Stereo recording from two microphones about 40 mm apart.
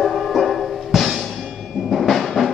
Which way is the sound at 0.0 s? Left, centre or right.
Centre.